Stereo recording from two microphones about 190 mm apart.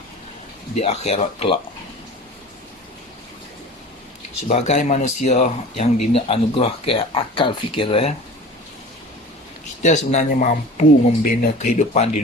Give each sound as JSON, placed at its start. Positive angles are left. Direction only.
{"t": 0.8, "sound": "speech", "side_deg": 30}
{"t": 4.4, "sound": "speech", "side_deg": 35}
{"t": 9.8, "sound": "speech", "side_deg": 40}